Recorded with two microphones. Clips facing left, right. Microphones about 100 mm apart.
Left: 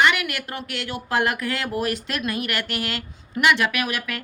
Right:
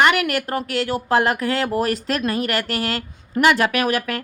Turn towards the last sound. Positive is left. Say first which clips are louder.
# right 6 dB
turn(degrees=-40)  # may be behind; listen again after turning